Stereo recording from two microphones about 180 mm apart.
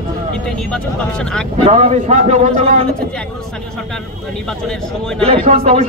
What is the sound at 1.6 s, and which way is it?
A man's voice, 35° right (ahead or behind).